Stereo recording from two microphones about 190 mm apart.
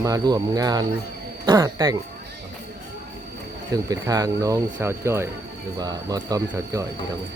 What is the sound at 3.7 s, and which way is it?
Speech, 20° right (ahead or behind).